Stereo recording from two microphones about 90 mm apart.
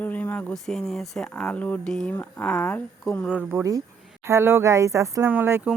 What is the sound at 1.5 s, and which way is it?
Speech, 15° left (ahead or behind).